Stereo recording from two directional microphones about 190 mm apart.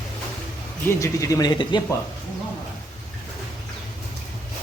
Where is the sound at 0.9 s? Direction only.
15° left (ahead or behind).